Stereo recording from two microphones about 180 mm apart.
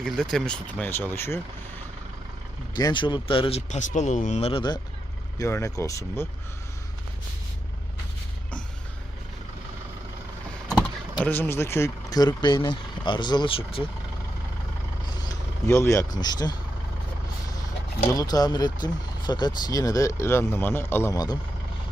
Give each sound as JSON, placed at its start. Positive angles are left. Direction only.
{"t": 0.0, "sound": "speech", "side_deg": 5}
{"t": 2.7, "sound": "speech", "side_deg": 25}
{"t": 5.4, "sound": "speech", "side_deg": 15}
{"t": 11.2, "sound": "speech", "side_deg": 10}
{"t": 15.3, "sound": "speech", "side_deg": 15}
{"t": 18.1, "sound": "speech", "side_deg": 20}